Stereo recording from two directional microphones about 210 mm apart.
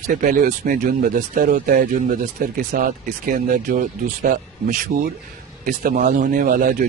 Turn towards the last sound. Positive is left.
turn(degrees=-40)  # may be behind; listen again after turning